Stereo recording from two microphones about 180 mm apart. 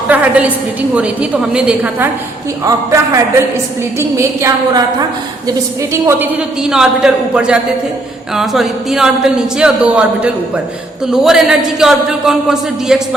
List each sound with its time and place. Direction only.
0.1 s a woman's voice: 10° right (ahead or behind)